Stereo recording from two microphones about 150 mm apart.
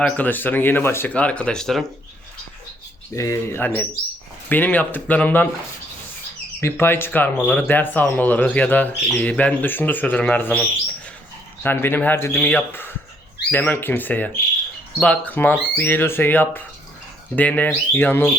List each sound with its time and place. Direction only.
0.0 s speech: 10° left (ahead or behind)
3.2 s speech: 20° left (ahead or behind)
6.6 s speech: 15° left (ahead or behind)
11.6 s speech: 15° left (ahead or behind)